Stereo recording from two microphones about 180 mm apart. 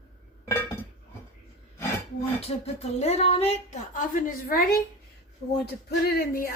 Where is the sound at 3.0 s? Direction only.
35° left (ahead or behind); by 6.5 s 60° left (ahead or behind).